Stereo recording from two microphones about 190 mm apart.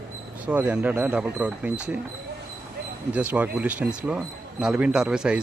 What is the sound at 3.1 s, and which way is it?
Speech, 10° right (ahead or behind).